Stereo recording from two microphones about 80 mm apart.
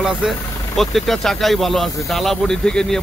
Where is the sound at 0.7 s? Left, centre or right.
Centre.